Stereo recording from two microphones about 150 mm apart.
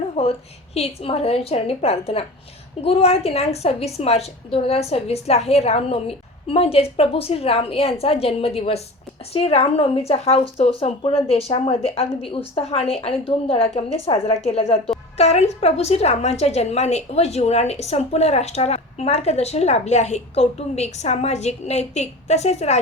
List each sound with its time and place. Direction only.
0.2 s a woman's voice: 40° left (ahead or behind)